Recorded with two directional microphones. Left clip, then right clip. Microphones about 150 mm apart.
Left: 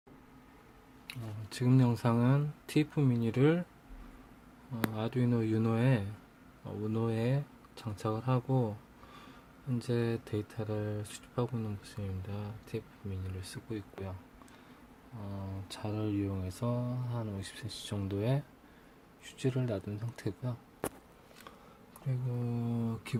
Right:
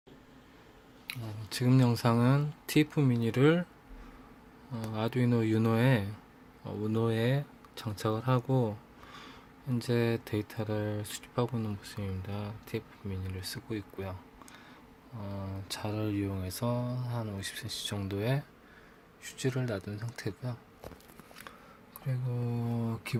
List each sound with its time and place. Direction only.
1.0 s speech: 5° right (ahead or behind)
4.7 s speech: 5° right (ahead or behind)
9.7 s speech: 10° right (ahead or behind)
15.2 s mantra: 5° right (ahead or behind); by 20.6 s 20° left (ahead or behind)
22.0 s speech: centre (ahead or behind)